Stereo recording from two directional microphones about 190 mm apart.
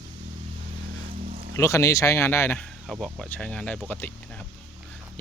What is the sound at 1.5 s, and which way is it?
Speech, 15° left (ahead or behind).